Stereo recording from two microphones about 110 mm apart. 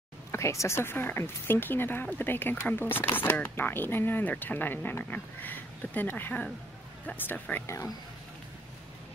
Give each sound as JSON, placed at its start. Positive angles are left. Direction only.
{"t": 0.3, "sound": "speech", "side_deg": 25}
{"t": 7.6, "sound": "speech", "side_deg": 25}